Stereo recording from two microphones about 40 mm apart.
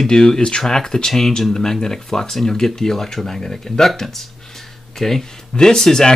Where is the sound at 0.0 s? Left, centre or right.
Centre.